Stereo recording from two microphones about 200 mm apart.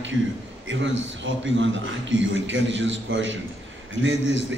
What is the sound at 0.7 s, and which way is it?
A man's voice, 70° right (ahead or behind).